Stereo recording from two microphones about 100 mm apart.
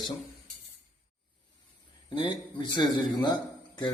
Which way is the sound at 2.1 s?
55° left (ahead or behind).